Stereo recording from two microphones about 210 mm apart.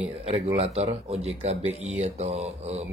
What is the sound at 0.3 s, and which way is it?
Speech, 30° right (ahead or behind).